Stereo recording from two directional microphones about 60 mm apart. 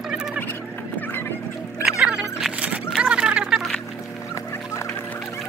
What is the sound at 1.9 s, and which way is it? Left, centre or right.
Music, centre.